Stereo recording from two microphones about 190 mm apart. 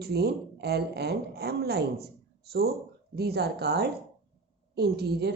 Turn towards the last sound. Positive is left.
turn(degrees=-60)  # may be behind; listen again after turning